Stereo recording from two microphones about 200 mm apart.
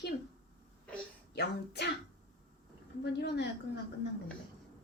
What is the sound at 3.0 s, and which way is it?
Speech, 55° left (ahead or behind).